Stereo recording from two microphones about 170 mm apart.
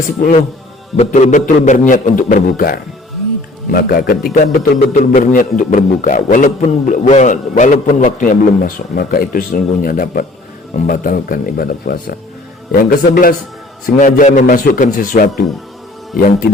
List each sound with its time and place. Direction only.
0.2 s a man's voice: 45° left (ahead or behind)